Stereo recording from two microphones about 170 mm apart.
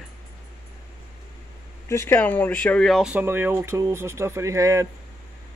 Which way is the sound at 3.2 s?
15° right (ahead or behind).